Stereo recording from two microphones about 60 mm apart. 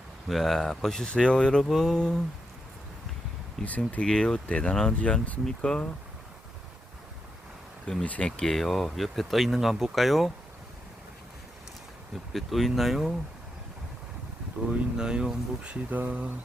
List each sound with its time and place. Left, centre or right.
0.3 s speech: centre
3.6 s speech: left
4.0 s speech: centre
8.0 s speech: centre
8.4 s speech: centre
12.3 s speech: centre
14.7 s speech: centre